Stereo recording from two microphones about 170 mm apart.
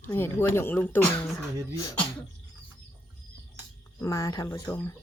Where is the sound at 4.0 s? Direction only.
20° left (ahead or behind).